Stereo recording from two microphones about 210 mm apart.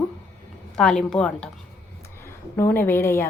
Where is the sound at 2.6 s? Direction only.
10° left (ahead or behind).